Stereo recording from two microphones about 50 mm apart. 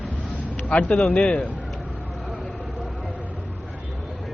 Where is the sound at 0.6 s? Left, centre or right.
Left.